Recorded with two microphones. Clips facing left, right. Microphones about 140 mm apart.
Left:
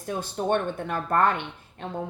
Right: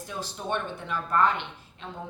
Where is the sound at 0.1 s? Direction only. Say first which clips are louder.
Left 7 dB; 50° left (ahead or behind).